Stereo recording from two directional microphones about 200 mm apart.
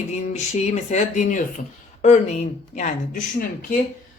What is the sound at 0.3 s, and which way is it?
Speech, 35° left (ahead or behind).